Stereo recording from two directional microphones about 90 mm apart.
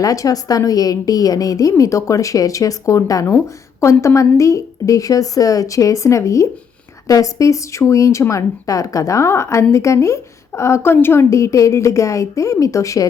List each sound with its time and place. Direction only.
0.0 s a woman's voice: 40° left (ahead or behind)